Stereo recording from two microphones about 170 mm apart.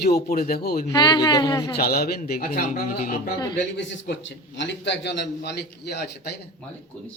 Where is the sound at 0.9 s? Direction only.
25° left (ahead or behind).